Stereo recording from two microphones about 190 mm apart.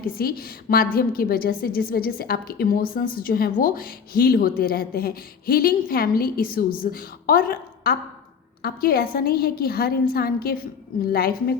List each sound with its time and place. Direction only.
0.2 s a woman's voice: 50° left (ahead or behind)